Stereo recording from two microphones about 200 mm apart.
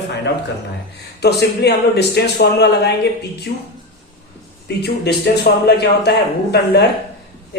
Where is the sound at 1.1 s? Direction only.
55° left (ahead or behind).